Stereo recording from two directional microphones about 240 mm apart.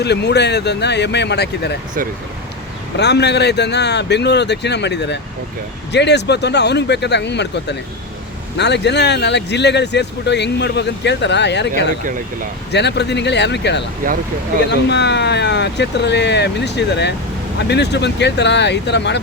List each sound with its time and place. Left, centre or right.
0.0 s speech: left
3.0 s speech: left
12.0 s speech: right
12.7 s speech: left
14.0 s speech: right
14.7 s speech: left